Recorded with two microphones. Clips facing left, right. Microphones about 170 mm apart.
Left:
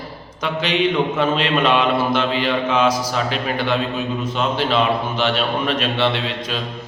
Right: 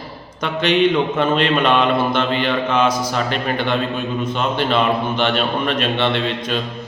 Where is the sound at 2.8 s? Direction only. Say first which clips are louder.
Even; 55° right (ahead or behind).